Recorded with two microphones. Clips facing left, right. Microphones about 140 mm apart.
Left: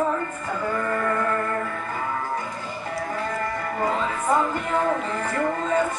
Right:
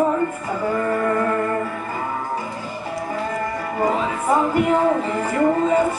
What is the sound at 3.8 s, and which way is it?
Music, 10° right (ahead or behind).